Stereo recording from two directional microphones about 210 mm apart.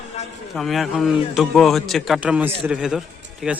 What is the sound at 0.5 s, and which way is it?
A man's voice, centre (ahead or behind).